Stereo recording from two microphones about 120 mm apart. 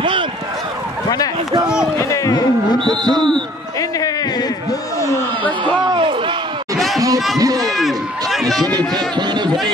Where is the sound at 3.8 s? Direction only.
30° left (ahead or behind).